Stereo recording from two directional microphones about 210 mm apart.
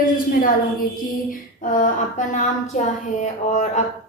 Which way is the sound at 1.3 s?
40° left (ahead or behind).